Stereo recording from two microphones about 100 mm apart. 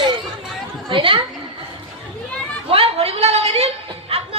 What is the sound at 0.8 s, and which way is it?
Speech, 60° right (ahead or behind).